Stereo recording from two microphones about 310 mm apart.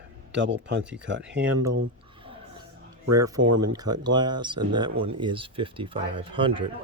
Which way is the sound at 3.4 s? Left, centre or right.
Right.